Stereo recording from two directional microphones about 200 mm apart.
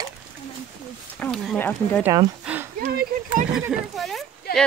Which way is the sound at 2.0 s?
20° right (ahead or behind).